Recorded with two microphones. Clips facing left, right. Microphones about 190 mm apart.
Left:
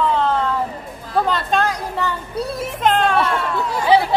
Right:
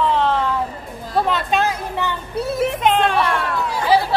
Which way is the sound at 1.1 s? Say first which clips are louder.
Even; 5° right (ahead or behind).